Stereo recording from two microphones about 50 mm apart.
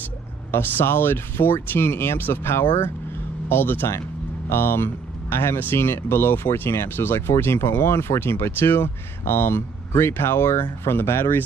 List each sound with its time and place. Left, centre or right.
0.5 s speech: left